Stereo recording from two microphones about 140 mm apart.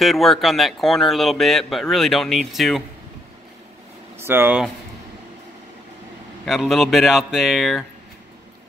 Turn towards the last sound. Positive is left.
turn(degrees=0)  # may be behind; listen again after turning